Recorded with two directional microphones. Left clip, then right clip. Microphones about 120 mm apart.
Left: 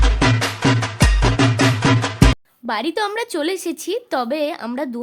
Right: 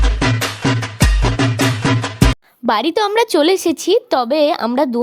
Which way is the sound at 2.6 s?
70° right (ahead or behind).